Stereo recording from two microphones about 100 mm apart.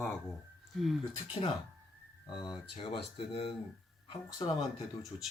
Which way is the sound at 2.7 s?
60° left (ahead or behind).